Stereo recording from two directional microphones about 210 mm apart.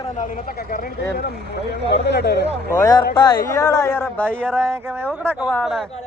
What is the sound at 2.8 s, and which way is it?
Speech, 15° left (ahead or behind).